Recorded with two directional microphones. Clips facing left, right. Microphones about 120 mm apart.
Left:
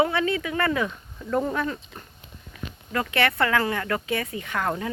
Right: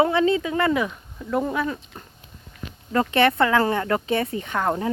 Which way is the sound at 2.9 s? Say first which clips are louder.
Right 5 dB; 25° right (ahead or behind).